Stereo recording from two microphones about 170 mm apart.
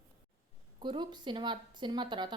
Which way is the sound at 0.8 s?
25° right (ahead or behind).